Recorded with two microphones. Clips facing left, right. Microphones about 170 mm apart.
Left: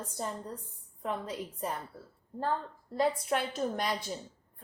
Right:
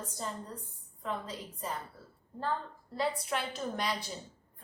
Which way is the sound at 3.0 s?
50° left (ahead or behind).